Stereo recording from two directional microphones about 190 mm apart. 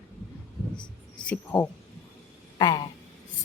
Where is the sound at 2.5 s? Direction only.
20° left (ahead or behind).